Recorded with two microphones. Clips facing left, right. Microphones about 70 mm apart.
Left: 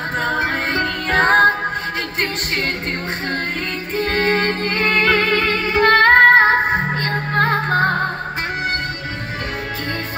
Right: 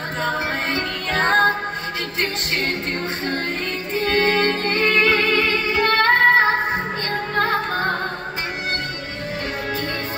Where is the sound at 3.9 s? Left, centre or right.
Left.